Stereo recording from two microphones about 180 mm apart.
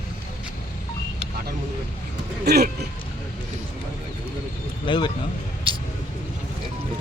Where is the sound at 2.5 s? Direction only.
65° right (ahead or behind).